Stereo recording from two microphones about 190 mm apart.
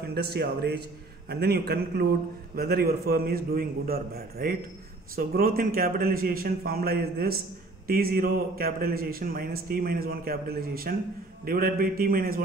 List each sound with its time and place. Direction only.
0.0 s a man's voice: 55° right (ahead or behind)